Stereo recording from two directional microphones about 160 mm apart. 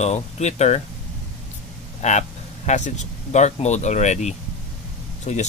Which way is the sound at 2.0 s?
45° left (ahead or behind).